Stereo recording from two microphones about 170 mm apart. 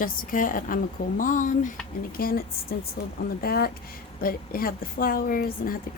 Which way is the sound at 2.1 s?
60° left (ahead or behind).